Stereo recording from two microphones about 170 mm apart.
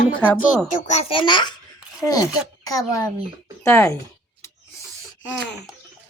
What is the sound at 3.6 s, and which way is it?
Speech, 20° left (ahead or behind).